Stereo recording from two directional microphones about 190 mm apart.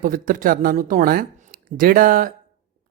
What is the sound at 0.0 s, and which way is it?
Speech, 45° right (ahead or behind).